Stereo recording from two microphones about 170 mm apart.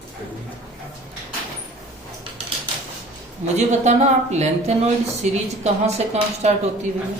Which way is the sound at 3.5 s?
40° right (ahead or behind).